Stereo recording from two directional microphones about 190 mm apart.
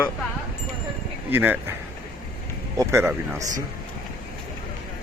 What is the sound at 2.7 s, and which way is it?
Speech, 10° right (ahead or behind).